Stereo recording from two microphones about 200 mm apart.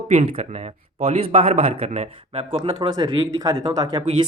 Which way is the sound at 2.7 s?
20° right (ahead or behind).